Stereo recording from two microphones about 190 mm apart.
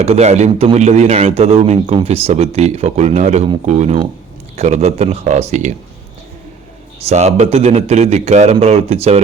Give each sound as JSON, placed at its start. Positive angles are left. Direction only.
{"t": 0.0, "sound": "a man's voice", "side_deg": -35}
{"t": 7.0, "sound": "a man's voice", "side_deg": -35}